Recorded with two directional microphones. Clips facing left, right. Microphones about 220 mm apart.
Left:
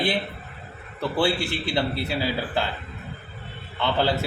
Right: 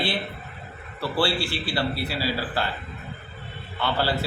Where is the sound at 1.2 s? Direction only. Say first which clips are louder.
Left 1 dB; 20° left (ahead or behind).